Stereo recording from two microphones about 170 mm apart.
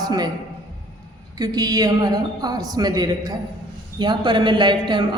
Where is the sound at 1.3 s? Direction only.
20° right (ahead or behind).